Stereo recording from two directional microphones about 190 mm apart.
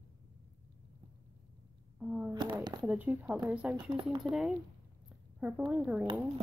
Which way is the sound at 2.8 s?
5° right (ahead or behind).